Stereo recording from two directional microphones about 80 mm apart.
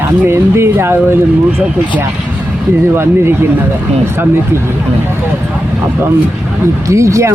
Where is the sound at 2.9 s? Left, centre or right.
Right.